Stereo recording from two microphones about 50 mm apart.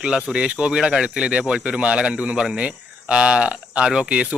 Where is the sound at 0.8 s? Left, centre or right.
Centre.